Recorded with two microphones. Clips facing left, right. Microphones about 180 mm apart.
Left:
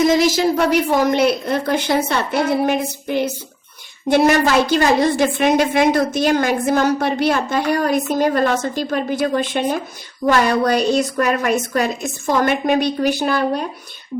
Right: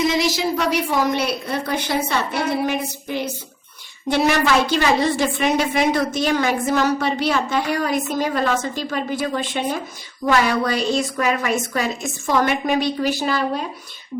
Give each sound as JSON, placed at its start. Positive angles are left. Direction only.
{"t": 0.0, "sound": "a woman's voice", "side_deg": 45}
{"t": 12.0, "sound": "a woman's voice", "side_deg": 35}
{"t": 12.4, "sound": "a woman's voice", "side_deg": 50}